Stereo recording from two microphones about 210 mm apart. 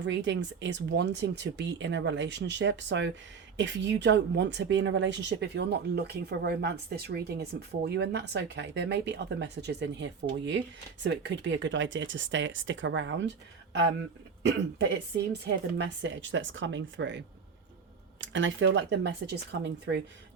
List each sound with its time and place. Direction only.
0.0 s speech: 60° right (ahead or behind)
15.3 s speech: 55° right (ahead or behind)